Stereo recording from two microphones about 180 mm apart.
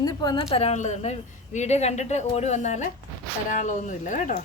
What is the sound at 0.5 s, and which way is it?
A woman's voice, 35° left (ahead or behind).